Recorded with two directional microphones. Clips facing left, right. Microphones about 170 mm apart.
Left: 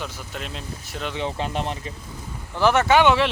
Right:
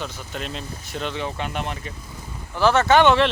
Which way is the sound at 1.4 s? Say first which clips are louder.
Left 2 dB; 30° left (ahead or behind).